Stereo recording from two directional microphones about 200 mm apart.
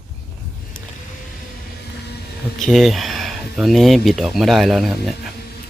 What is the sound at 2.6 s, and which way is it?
Speech, centre (ahead or behind).